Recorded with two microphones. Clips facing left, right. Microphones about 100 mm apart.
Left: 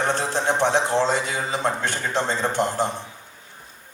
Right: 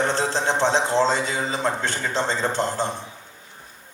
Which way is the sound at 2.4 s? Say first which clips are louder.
Left 1 dB; 20° left (ahead or behind).